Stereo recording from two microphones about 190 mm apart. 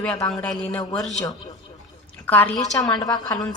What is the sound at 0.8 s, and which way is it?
Speech, 20° left (ahead or behind).